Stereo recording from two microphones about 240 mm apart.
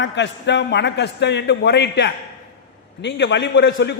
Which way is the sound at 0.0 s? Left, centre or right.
Left.